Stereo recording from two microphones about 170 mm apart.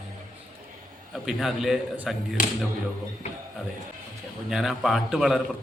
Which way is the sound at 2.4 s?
50° left (ahead or behind).